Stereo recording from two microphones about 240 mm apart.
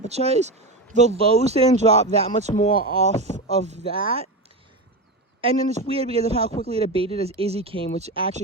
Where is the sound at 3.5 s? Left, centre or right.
Right.